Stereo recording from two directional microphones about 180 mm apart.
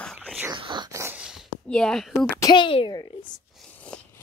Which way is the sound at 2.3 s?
20° left (ahead or behind).